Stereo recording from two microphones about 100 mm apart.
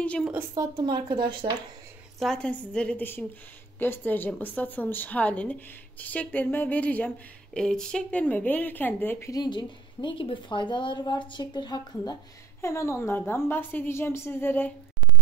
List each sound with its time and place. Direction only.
0.2 s a woman's voice: 15° right (ahead or behind)
0.6 s speech: 45° right (ahead or behind)
2.1 s a woman's voice: 5° left (ahead or behind); by 9.3 s 20° left (ahead or behind)
9.3 s a woman's voice: 45° left (ahead or behind)
12.6 s a woman's voice: 30° left (ahead or behind)